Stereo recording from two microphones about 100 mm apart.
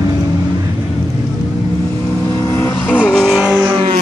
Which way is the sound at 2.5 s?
25° left (ahead or behind).